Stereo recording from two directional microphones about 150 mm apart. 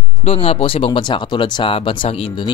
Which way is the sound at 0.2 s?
40° left (ahead or behind).